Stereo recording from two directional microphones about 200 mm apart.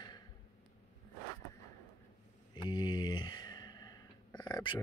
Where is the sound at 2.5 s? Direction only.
20° left (ahead or behind).